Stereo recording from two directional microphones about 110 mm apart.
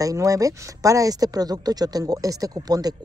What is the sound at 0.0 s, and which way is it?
Speech, 30° right (ahead or behind).